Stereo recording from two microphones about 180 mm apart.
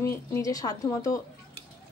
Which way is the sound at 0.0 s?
15° left (ahead or behind).